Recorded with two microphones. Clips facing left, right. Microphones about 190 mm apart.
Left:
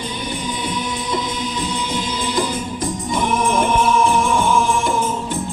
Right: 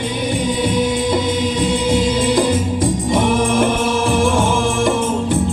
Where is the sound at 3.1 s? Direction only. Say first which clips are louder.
Right 2 dB; 85° right.